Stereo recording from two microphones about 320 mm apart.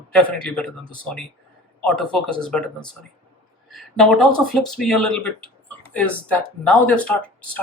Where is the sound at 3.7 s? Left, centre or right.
Centre.